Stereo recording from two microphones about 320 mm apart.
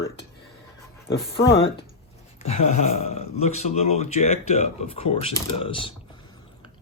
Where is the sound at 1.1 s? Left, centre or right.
Left.